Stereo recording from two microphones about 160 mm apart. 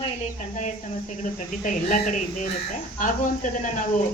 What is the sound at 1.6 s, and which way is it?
Speech, 50° left (ahead or behind).